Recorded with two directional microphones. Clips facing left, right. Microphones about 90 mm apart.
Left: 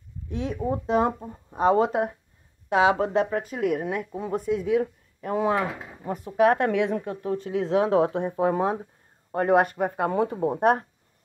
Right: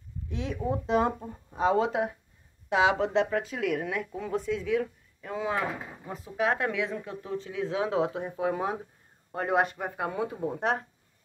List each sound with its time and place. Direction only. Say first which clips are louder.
0.3 s speech: left 3 dB; 40° left (ahead or behind)
1.2 s speech: left 2 dB; 15° left (ahead or behind)
1.6 s a woman's voice: left 4 dB; 45° left (ahead or behind)
4.4 s a woman's voice: left 5 dB; 45° left (ahead or behind)
8.4 s a woman's voice: left 5 dB; 40° left (ahead or behind)